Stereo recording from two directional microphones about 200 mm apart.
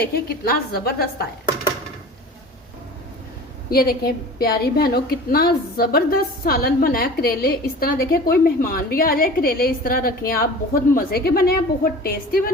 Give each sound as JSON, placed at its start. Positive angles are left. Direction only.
{"t": 0.0, "sound": "a woman's voice", "side_deg": 50}
{"t": 3.7, "sound": "a woman's voice", "side_deg": 50}